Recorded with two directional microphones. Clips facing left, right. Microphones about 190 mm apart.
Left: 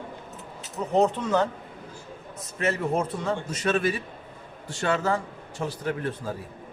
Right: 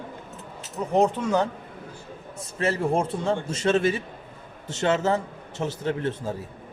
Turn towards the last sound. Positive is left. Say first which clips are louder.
# right 2 dB
turn(degrees=-25)  # may be behind; listen again after turning